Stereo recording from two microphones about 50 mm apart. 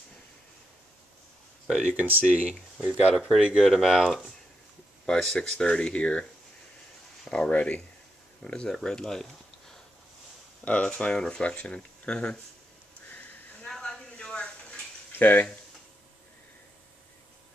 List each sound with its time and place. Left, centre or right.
1.9 s speech: right
3.6 s speech: centre
5.0 s speech: centre
7.2 s speech: centre
7.5 s speech: left
8.6 s speech: centre
10.6 s speech: left
11.1 s speech: centre
11.4 s speech: left
13.8 s a sound: centre
15.1 s speech: left